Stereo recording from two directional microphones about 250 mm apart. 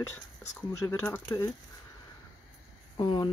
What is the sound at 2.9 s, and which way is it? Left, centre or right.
Speech, centre.